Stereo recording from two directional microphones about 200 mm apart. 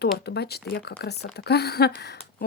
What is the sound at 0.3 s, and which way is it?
Speech, 55° left (ahead or behind).